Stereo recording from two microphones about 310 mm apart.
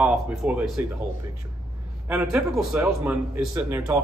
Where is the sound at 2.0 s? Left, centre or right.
Centre.